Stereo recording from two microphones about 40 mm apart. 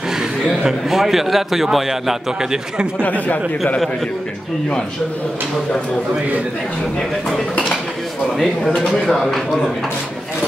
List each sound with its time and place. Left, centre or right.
0.7 s a man's voice: centre
3.0 s speech: left
8.4 s a man's voice: centre